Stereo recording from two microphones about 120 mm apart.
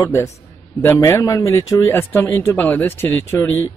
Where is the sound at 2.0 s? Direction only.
20° left (ahead or behind).